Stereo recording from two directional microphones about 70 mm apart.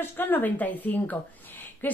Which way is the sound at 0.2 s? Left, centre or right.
Left.